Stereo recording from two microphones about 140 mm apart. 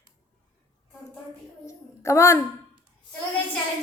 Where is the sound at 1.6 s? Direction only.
20° left (ahead or behind).